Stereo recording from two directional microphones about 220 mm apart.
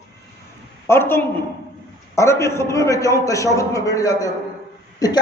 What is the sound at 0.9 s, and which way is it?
A man's voice, 10° left (ahead or behind).